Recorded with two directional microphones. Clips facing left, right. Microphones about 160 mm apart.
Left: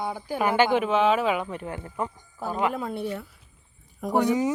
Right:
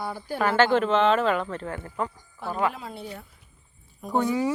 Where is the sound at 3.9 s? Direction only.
85° left.